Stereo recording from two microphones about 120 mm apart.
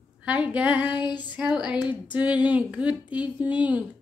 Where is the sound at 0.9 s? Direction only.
40° left (ahead or behind).